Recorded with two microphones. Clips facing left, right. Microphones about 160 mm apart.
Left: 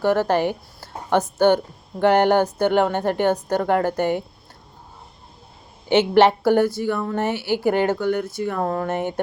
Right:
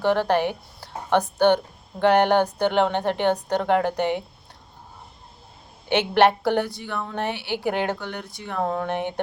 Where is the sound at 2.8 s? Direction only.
10° left (ahead or behind).